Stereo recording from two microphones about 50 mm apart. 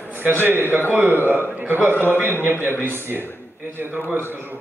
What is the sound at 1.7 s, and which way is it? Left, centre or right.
Speech, right.